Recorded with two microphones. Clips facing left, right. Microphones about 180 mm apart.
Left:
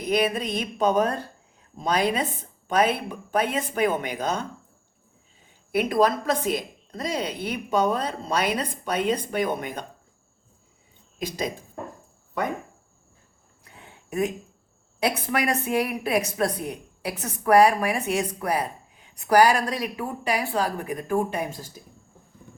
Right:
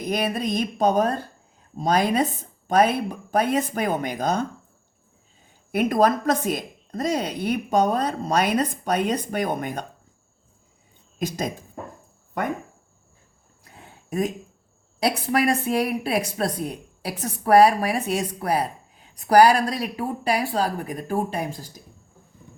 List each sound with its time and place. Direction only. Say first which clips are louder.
0.1 s speech: left 1 dB; 40° right (ahead or behind)
5.7 s speech: right 2 dB; 45° right (ahead or behind)
11.2 s speech: right 2 dB; 45° right (ahead or behind)
13.7 s a sound: right 4 dB; 35° right (ahead or behind)
15.0 s speech: right 3 dB; 35° right (ahead or behind)